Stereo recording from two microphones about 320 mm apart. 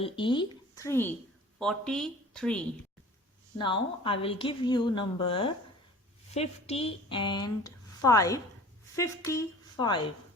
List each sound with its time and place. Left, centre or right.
0.0 s a woman's voice: centre
3.6 s speech: centre